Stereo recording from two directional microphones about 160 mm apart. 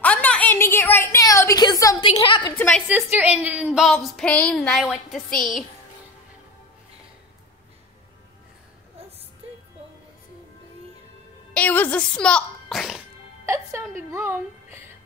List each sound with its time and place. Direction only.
0.0 s a sound: 10° left (ahead or behind)
2.0 s a woman's voice: 30° left (ahead or behind)
2.5 s a woman's voice: 10° left (ahead or behind)
2.9 s speech: 10° right (ahead or behind)
11.5 s speech: 10° left (ahead or behind)
13.5 s a woman's voice: 15° right (ahead or behind)